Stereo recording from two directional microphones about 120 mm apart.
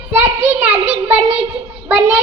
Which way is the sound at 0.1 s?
10° right (ahead or behind).